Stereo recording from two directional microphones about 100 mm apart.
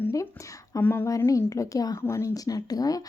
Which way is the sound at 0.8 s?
20° left (ahead or behind).